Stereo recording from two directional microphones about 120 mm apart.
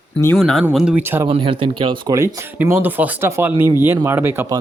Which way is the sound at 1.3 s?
50° right (ahead or behind).